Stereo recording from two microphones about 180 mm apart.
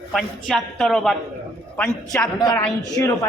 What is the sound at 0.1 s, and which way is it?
A woman's voice, centre (ahead or behind).